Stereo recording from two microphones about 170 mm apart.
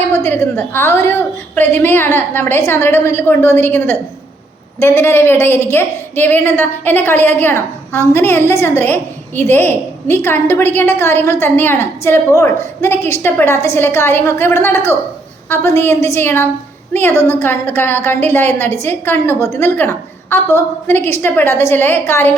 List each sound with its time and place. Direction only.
0.1 s a woman's voice: 15° left (ahead or behind)